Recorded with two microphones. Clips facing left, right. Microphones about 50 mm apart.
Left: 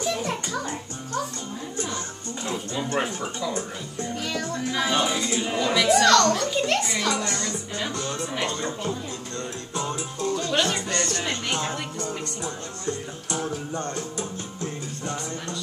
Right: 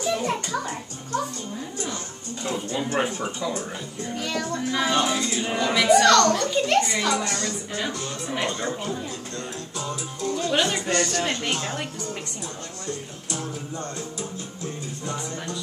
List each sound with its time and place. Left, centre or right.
0.0 s music: centre
2.8 s speech: centre
4.1 s music: centre
5.0 s speech: centre
5.4 s a child's voice: centre
8.4 s speech: centre
9.8 s music: left
10.3 s speech: centre
10.9 s speech: right
12.8 s music: left